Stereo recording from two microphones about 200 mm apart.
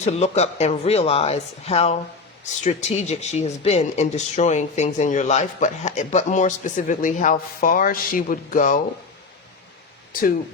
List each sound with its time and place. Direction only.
0.0 s speech: 35° left (ahead or behind)
10.1 s speech: 45° left (ahead or behind)